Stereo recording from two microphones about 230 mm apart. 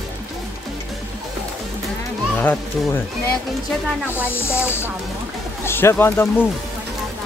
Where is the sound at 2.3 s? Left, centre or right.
Centre.